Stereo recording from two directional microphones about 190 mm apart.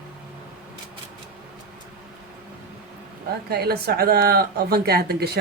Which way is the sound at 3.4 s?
55° right (ahead or behind).